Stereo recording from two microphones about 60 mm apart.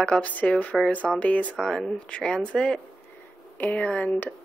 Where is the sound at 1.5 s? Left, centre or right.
Centre.